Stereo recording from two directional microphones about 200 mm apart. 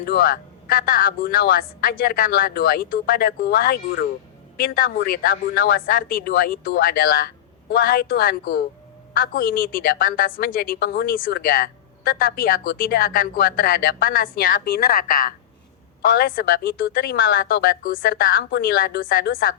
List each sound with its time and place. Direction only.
0.0 s a woman's voice: 45° left (ahead or behind)